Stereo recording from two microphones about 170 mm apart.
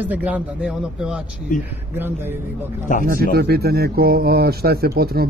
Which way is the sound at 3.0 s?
60° right (ahead or behind).